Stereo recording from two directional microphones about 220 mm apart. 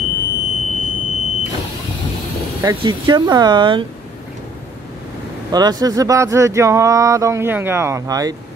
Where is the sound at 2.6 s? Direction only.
20° right (ahead or behind).